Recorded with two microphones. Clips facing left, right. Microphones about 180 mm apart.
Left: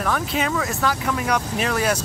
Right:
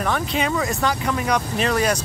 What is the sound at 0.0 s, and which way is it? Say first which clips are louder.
Speech: right 1 dB; centre (ahead or behind).